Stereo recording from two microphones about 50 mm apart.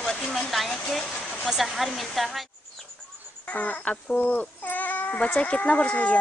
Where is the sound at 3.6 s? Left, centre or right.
Left.